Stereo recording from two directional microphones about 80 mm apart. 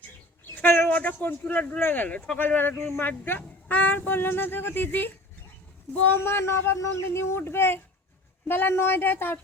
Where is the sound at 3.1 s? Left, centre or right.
Left.